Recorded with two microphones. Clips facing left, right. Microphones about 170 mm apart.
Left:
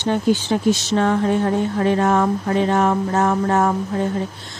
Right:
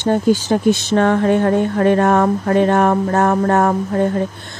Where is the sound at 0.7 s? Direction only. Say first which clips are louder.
Right 3 dB; 60° right (ahead or behind).